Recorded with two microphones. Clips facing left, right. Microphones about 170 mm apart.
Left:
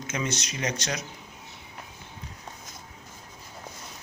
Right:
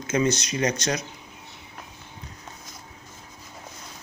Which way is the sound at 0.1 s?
35° right (ahead or behind).